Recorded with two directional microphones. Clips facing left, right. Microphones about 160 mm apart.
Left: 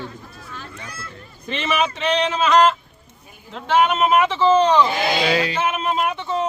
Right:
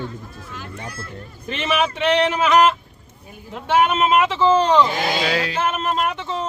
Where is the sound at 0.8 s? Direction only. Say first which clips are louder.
Right 3 dB; 35° right (ahead or behind).